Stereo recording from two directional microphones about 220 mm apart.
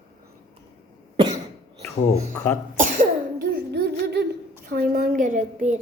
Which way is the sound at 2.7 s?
40° right (ahead or behind).